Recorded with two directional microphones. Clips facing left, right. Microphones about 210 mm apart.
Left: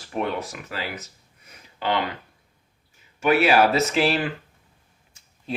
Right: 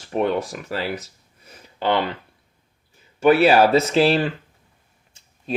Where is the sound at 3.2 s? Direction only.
30° right (ahead or behind).